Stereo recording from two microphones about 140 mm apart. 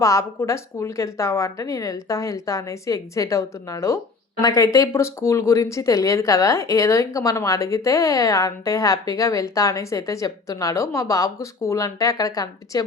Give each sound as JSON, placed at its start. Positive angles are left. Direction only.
{"t": 0.0, "sound": "a woman's voice", "side_deg": 20}